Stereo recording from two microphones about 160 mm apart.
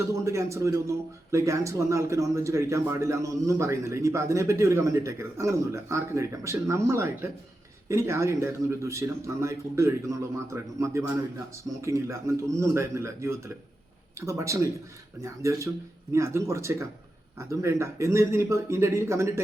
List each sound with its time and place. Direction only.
0.3 s a man's voice: 20° right (ahead or behind)